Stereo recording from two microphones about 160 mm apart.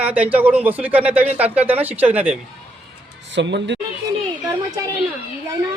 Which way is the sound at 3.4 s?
90° right.